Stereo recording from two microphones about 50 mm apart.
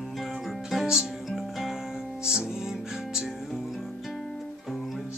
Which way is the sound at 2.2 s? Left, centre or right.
Centre.